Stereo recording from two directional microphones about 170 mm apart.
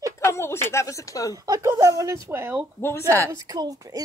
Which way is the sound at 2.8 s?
15° left (ahead or behind).